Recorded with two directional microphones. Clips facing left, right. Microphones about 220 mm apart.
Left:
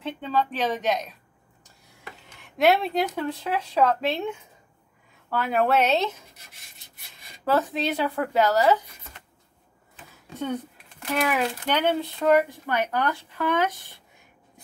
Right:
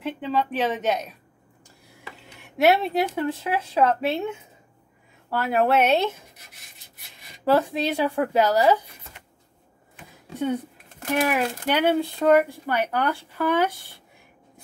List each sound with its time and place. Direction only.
0.0 s speech: 5° right (ahead or behind)
2.4 s speech: 10° right (ahead or behind)
5.4 s speech: 10° right (ahead or behind)
7.5 s speech: 10° right (ahead or behind)
11.3 s speech: 10° right (ahead or behind)